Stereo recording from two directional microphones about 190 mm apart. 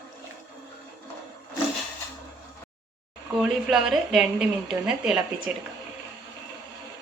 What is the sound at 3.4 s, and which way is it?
Speech, centre (ahead or behind).